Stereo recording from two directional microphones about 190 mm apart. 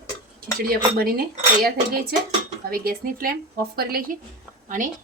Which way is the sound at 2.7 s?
50° right (ahead or behind).